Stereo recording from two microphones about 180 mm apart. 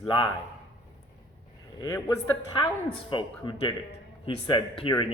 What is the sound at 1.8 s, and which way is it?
A man's voice, 20° left (ahead or behind).